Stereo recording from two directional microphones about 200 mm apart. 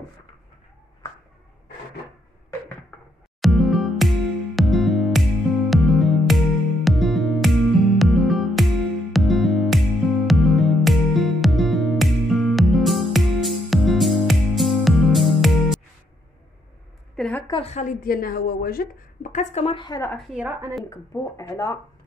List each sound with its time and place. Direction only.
3.3 s music: centre (ahead or behind)
17.1 s a sound: 5° left (ahead or behind)
17.5 s a woman's voice: 30° left (ahead or behind)
18.0 s speech: 45° left (ahead or behind); by 20.0 s 25° left (ahead or behind)
20.3 s speech: 5° right (ahead or behind)
21.4 s speech: 15° left (ahead or behind)